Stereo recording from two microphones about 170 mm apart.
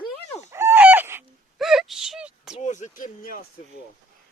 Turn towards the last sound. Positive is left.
turn(degrees=55)  # may be behind; listen again after turning